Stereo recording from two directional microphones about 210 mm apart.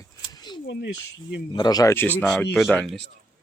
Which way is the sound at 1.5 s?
20° left (ahead or behind).